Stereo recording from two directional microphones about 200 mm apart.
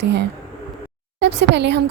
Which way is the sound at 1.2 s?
60° right (ahead or behind).